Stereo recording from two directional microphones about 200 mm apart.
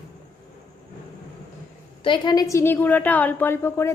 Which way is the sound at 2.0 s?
25° left (ahead or behind).